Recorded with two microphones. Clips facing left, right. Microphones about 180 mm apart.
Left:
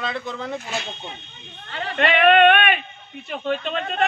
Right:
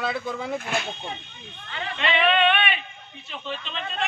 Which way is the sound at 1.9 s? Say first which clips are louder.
Left 7 dB; 55° left (ahead or behind).